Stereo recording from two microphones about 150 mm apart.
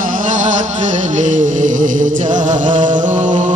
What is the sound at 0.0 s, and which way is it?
Music, 60° right (ahead or behind).